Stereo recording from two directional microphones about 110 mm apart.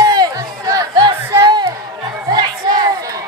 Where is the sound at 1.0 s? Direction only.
40° right (ahead or behind).